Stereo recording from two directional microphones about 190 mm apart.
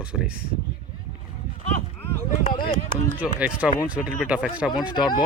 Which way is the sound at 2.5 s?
25° left (ahead or behind).